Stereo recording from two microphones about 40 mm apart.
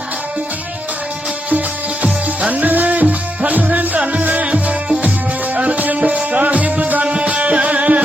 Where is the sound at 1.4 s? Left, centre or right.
Right.